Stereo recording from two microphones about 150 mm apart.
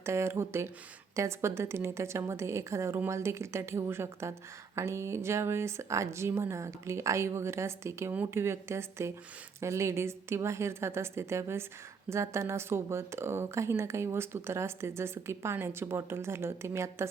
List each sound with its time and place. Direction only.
0.0 s a woman's voice: 15° right (ahead or behind)